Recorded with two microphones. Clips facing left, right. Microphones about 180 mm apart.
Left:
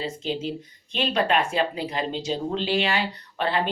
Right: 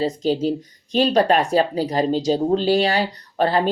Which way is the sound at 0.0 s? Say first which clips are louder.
Right 9 dB; 40° right (ahead or behind).